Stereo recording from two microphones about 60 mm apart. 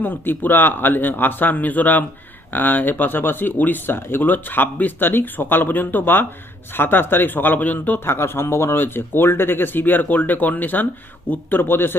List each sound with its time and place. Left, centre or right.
0.0 s speech: left